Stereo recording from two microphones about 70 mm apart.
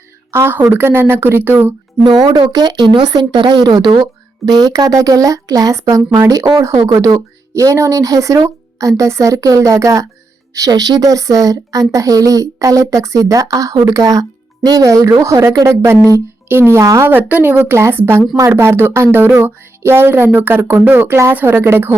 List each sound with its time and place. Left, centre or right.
0.3 s a woman's voice: right
0.7 s music: right
2.0 s a woman's voice: right
10.5 s speech: right
14.8 s a woman's voice: right
15.9 s music: right
17.1 s music: right